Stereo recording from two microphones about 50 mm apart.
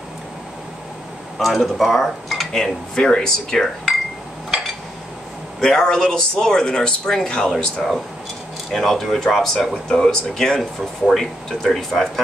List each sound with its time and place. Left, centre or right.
1.4 s speech: centre
5.6 s speech: centre
7.5 s speech: centre